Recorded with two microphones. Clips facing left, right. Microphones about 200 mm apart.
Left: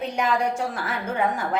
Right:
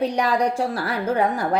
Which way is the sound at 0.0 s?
35° right (ahead or behind).